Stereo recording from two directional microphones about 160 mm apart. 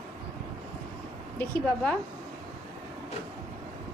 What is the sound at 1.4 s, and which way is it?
Speech, 10° left (ahead or behind).